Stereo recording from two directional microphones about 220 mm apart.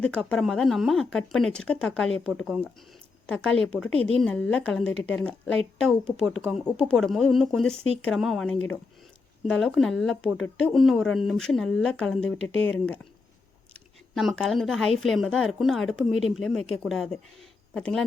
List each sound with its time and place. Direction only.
0.0 s speech: 5° left (ahead or behind)
3.9 s speech: 25° right (ahead or behind)
4.2 s speech: 5° left (ahead or behind)
12.2 s speech: 30° right (ahead or behind)
12.7 s a woman's voice: 5° left (ahead or behind)